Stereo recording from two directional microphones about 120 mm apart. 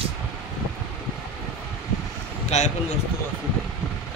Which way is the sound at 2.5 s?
70° left (ahead or behind).